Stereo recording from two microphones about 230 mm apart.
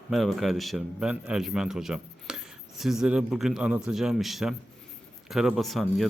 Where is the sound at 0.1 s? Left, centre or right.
Centre.